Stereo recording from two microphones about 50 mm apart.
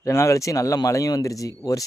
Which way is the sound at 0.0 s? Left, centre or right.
Left.